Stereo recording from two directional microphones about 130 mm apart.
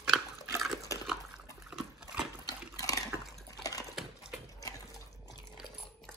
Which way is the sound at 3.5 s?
30° left (ahead or behind).